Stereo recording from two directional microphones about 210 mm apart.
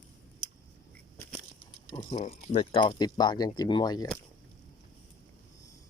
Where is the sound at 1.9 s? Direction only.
25° left (ahead or behind).